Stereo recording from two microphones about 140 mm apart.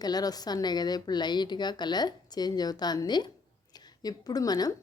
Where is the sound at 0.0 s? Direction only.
30° left (ahead or behind).